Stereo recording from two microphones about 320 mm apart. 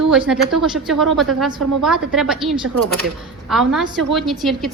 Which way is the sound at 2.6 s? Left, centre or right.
Right.